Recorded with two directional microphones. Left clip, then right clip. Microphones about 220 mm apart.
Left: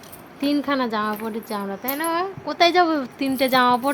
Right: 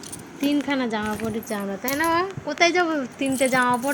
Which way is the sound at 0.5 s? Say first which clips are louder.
Left 3 dB; 25° left (ahead or behind).